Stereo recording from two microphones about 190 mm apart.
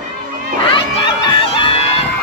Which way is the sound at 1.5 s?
30° left (ahead or behind).